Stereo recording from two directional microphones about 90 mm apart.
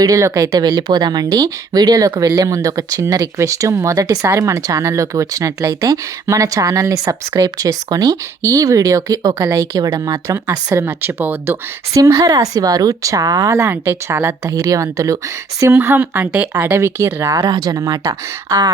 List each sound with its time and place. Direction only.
0.0 s speech: 35° right (ahead or behind)
10.8 s speech: 25° right (ahead or behind)
11.9 s speech: 40° right (ahead or behind)
14.5 s speech: 40° right (ahead or behind)
15.6 s speech: 25° right (ahead or behind)
17.4 s speech: 50° right (ahead or behind)